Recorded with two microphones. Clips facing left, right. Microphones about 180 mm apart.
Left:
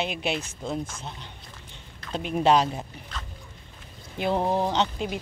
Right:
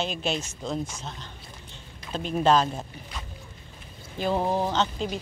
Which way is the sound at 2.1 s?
15° left (ahead or behind).